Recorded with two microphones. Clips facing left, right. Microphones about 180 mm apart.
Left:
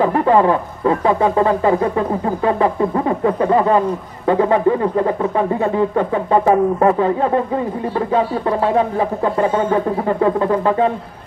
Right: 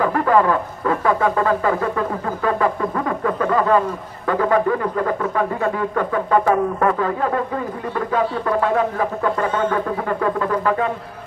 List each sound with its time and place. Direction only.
0.0 s speech: 25° left (ahead or behind)